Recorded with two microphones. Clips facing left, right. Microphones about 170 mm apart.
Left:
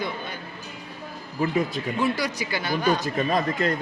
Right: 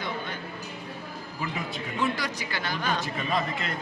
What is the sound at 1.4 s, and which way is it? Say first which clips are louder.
Speech: left 10 dB; 40° left (ahead or behind).